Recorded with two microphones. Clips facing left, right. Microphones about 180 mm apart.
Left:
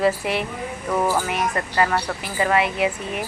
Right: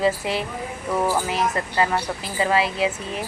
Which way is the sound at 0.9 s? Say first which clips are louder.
Left 1 dB; 5° right (ahead or behind).